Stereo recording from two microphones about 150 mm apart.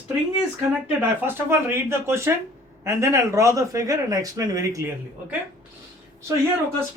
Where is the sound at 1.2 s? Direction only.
15° right (ahead or behind).